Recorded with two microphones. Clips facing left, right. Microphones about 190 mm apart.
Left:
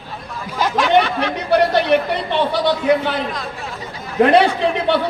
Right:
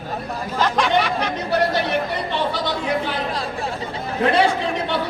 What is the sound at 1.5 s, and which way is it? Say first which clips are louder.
Speech: left 7 dB; 65° left (ahead or behind).